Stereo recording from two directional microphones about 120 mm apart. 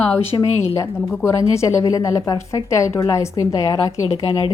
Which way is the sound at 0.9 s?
20° left (ahead or behind).